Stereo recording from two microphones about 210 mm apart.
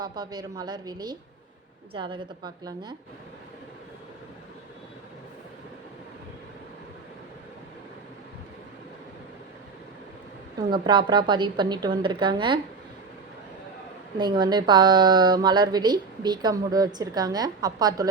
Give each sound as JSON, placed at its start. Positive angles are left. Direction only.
{"t": 0.0, "sound": "speech", "side_deg": -20}
{"t": 10.7, "sound": "speech", "side_deg": -20}
{"t": 14.2, "sound": "speech", "side_deg": -20}